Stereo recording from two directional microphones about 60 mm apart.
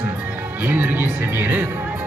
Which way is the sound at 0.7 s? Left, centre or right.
Right.